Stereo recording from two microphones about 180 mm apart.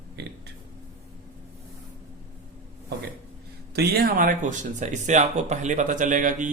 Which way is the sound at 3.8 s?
60° right (ahead or behind).